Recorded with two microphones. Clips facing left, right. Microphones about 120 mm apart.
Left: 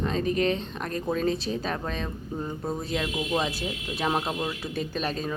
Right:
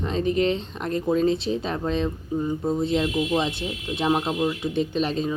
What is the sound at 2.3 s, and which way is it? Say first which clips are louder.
Speech: right 7 dB; 5° right (ahead or behind).